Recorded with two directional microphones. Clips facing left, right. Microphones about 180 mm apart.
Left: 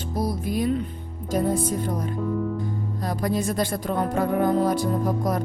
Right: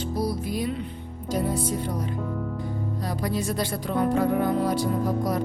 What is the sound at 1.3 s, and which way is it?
Speech, 50° left (ahead or behind).